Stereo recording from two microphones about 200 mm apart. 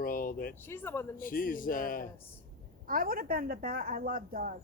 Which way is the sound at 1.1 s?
45° left (ahead or behind).